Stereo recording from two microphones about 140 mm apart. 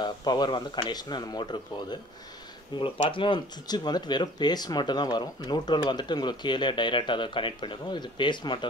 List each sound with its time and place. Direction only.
0.0 s speech: 30° left (ahead or behind)